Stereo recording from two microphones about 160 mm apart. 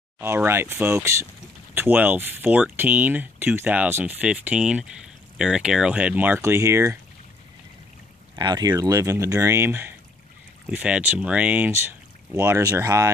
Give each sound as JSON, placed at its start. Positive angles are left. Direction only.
{"t": 0.2, "sound": "speech", "side_deg": -15}
{"t": 8.4, "sound": "speech", "side_deg": -25}